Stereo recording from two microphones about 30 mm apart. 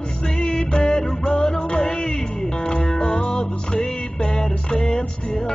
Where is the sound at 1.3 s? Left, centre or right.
Left.